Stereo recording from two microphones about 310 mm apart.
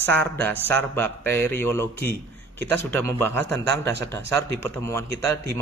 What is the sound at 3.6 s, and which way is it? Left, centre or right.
Speech, right.